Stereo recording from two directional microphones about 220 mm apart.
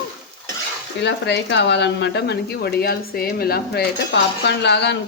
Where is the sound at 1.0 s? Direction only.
55° left (ahead or behind).